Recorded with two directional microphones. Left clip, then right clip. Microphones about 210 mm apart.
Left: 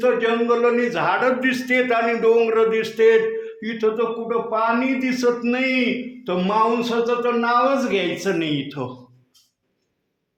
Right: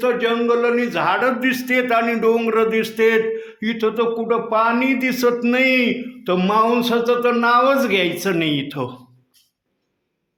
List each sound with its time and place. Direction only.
0.0 s a man's voice: 20° right (ahead or behind); by 9.0 s 35° right (ahead or behind)